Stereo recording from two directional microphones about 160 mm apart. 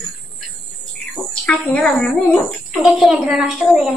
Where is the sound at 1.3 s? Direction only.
5° left (ahead or behind).